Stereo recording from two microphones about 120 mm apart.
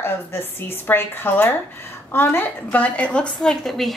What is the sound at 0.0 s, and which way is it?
A woman's voice, 20° left (ahead or behind).